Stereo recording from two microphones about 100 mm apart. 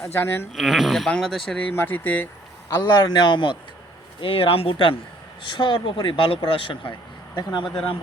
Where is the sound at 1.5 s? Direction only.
15° left (ahead or behind).